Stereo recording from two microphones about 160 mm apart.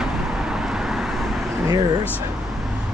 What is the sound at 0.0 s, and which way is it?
Vehicle, 5° right (ahead or behind).